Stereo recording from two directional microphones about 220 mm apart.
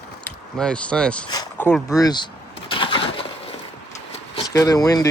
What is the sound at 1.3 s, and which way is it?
Vehicle, 15° left (ahead or behind).